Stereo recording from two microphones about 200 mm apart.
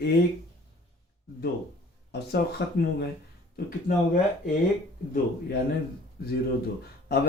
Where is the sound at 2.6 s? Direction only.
60° left (ahead or behind).